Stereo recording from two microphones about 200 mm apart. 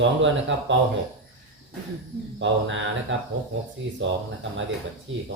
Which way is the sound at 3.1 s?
65° right (ahead or behind).